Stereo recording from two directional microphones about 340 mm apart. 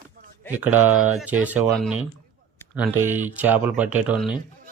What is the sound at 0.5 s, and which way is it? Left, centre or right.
Speech, centre.